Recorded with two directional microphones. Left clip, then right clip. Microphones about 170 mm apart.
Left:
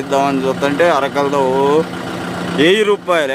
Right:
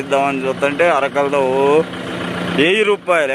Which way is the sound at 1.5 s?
15° left (ahead or behind).